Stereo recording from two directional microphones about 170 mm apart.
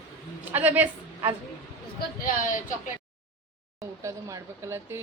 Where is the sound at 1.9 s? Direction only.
55° left (ahead or behind).